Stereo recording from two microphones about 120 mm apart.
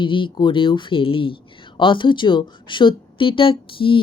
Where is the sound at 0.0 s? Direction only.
45° left (ahead or behind).